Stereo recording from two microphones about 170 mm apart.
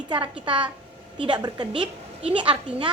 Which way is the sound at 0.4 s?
30° right (ahead or behind).